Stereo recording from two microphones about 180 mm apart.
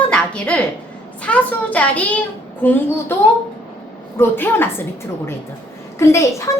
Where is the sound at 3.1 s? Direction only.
15° left (ahead or behind).